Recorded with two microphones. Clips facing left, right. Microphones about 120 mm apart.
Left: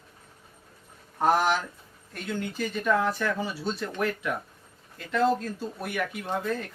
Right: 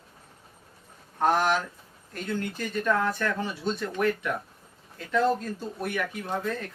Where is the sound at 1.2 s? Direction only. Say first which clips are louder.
Even; 5° left (ahead or behind).